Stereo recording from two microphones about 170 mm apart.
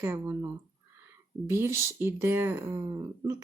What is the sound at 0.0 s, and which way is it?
Speech, 15° right (ahead or behind).